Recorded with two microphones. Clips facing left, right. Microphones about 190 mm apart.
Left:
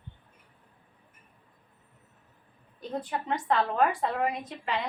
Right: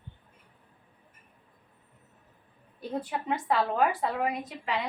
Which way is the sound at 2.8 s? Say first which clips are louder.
Even; 10° right (ahead or behind).